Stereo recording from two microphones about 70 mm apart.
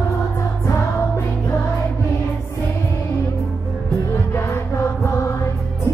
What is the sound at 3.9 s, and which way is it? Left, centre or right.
Music, left.